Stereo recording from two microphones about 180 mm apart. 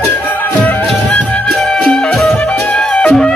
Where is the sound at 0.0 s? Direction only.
10° left (ahead or behind).